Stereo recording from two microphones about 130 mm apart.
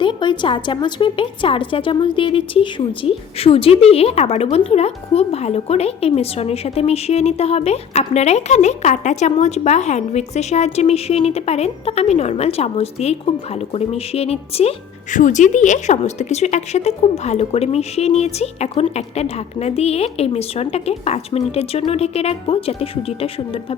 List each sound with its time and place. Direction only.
0.0 s a woman's voice: 35° left (ahead or behind)
15.1 s a woman's voice: 70° left (ahead or behind); by 23.3 s 45° left (ahead or behind)